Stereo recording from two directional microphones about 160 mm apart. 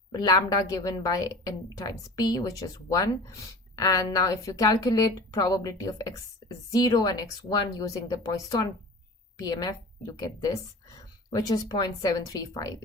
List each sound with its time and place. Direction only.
0.1 s a woman's voice: 25° left (ahead or behind)